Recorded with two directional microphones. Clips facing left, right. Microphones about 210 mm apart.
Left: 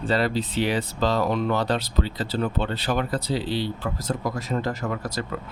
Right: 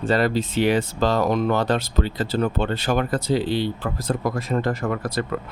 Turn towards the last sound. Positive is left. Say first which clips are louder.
# right 4 dB
turn(degrees=-55)  # may be behind; listen again after turning